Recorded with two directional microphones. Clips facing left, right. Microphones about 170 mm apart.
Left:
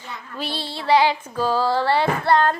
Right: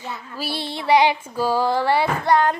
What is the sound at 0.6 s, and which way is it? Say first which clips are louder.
Female singing: right 1 dB; 15° right (ahead or behind).